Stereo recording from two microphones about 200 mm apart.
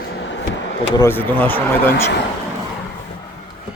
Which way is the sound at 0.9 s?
10° left (ahead or behind).